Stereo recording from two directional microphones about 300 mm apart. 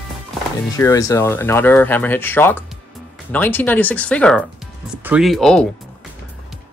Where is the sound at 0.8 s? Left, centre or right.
Centre.